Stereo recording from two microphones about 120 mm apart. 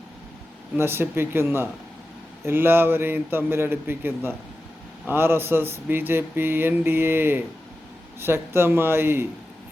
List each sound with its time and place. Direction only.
0.8 s speech: 20° right (ahead or behind)